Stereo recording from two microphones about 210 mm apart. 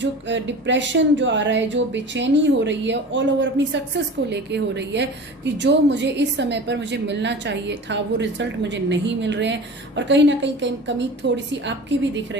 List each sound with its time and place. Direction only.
0.0 s a woman's voice: 60° right (ahead or behind)